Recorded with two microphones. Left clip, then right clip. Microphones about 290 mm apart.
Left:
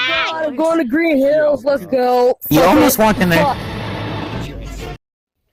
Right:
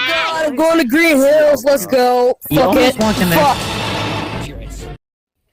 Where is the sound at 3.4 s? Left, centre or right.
Right.